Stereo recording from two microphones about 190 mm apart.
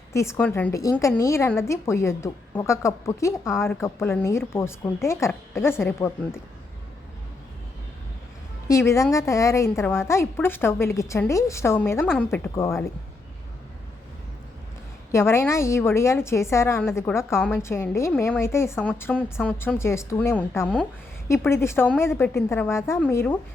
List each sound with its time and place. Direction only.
0.1 s a woman's voice: 15° left (ahead or behind)
8.6 s a woman's voice: 15° left (ahead or behind)
15.1 s a woman's voice: 15° left (ahead or behind)